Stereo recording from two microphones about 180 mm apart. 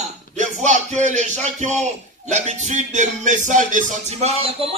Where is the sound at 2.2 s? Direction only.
40° right (ahead or behind).